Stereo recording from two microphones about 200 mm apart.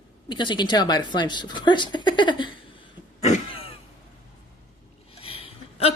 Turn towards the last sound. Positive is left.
turn(degrees=30)  # may be behind; listen again after turning